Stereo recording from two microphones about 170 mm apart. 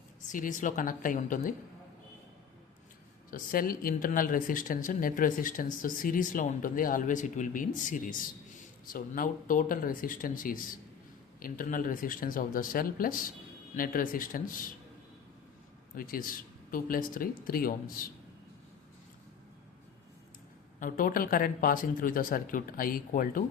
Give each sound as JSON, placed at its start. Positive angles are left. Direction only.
{"t": 0.3, "sound": "speech", "side_deg": 50}
{"t": 3.2, "sound": "speech", "side_deg": 55}
{"t": 16.0, "sound": "speech", "side_deg": 55}
{"t": 20.7, "sound": "speech", "side_deg": 50}